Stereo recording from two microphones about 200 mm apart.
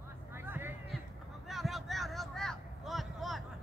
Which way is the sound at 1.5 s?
Centre (ahead or behind).